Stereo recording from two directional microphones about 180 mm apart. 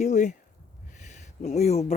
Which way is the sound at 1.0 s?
40° left (ahead or behind).